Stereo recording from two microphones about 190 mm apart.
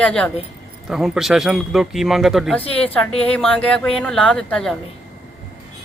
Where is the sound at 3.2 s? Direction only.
5° left (ahead or behind).